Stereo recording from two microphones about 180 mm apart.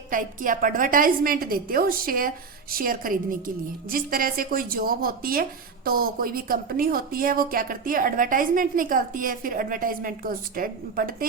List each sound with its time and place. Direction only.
0.1 s a woman's voice: 50° right (ahead or behind)